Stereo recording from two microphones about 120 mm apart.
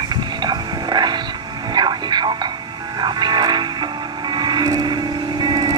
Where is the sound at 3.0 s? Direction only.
35° right (ahead or behind).